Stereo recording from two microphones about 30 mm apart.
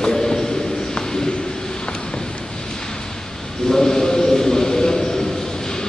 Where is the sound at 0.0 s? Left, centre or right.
Centre.